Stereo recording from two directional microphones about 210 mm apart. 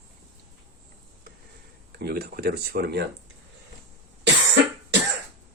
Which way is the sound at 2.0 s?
50° right (ahead or behind).